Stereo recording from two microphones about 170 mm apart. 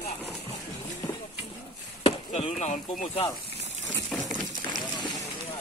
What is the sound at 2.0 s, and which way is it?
Chop, 35° left (ahead or behind).